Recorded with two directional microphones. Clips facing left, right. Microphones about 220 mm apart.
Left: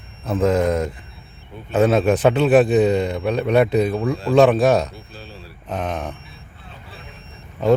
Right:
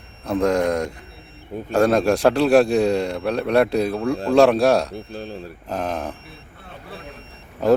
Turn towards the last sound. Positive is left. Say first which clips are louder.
# even
turn(degrees=0)  # may be behind; listen again after turning